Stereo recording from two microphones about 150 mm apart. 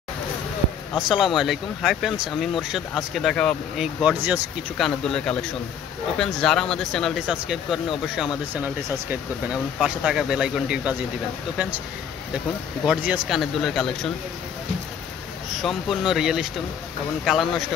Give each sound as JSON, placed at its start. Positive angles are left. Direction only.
{"t": 0.9, "sound": "speech", "side_deg": -5}
{"t": 4.7, "sound": "speech", "side_deg": 5}
{"t": 12.8, "sound": "speech", "side_deg": -5}
{"t": 15.5, "sound": "speech", "side_deg": 0}